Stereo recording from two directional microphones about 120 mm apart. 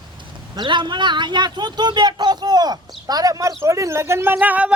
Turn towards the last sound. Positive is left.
turn(degrees=-15)  # may be behind; listen again after turning